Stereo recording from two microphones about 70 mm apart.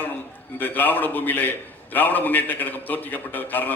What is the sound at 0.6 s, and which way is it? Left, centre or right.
A man's voice, left.